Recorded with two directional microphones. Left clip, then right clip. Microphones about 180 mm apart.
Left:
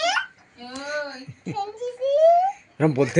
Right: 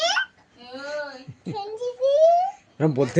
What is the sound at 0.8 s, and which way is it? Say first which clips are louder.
Child singing: left 2 dB; 5° right (ahead or behind).